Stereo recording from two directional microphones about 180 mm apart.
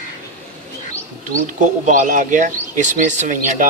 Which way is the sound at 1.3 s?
45° right (ahead or behind).